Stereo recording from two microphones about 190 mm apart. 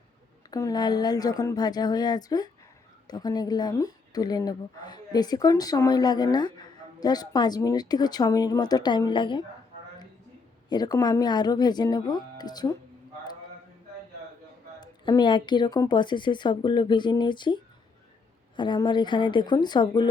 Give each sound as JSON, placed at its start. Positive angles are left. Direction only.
{"t": 0.5, "sound": "speech", "side_deg": 20}
{"t": 10.7, "sound": "speech", "side_deg": 20}
{"t": 14.8, "sound": "speech", "side_deg": 20}